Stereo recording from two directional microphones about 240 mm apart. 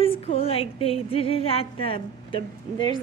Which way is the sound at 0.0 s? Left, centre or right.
Left.